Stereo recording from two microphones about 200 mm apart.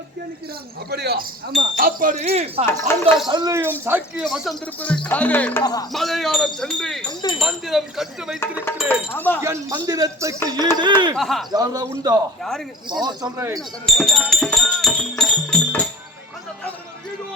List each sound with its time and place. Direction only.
0.9 s speech: 55° right (ahead or behind)
1.8 s speech: 45° right (ahead or behind)
2.6 s speech: 10° left (ahead or behind)
3.2 s speech: 20° right (ahead or behind); by 7.1 s centre (ahead or behind)
7.1 s speech: 20° left (ahead or behind)
7.3 s speech: centre (ahead or behind)
8.4 s speech: 10° left (ahead or behind)
9.4 s speech: 15° right (ahead or behind)
11.2 s speech: centre (ahead or behind)
11.5 s speech: 20° right (ahead or behind)
12.4 s speech: centre (ahead or behind)
12.9 s speech: 20° right (ahead or behind)
13.8 s speech: centre (ahead or behind)
15.2 s music: 5° left (ahead or behind)